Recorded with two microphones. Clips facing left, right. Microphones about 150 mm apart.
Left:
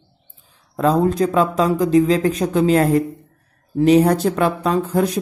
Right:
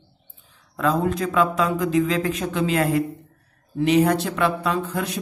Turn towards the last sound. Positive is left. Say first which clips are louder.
# left 7 dB
turn(degrees=40)  # may be behind; listen again after turning